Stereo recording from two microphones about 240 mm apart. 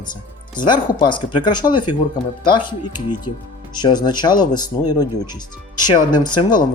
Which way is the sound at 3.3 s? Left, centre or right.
Left.